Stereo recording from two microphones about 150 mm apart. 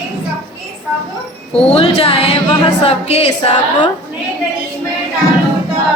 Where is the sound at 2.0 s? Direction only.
45° left (ahead or behind).